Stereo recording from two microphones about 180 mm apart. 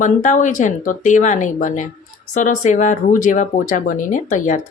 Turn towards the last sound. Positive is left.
turn(degrees=45)  # may be behind; listen again after turning